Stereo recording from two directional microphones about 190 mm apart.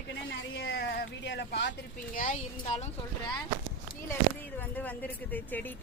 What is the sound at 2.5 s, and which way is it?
Speech, 35° left (ahead or behind).